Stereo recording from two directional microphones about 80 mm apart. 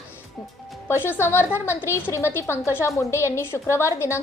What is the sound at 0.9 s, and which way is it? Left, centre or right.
A woman's voice, left.